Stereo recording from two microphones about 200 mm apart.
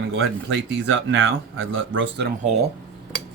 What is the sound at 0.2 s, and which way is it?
Speech, 60° right (ahead or behind).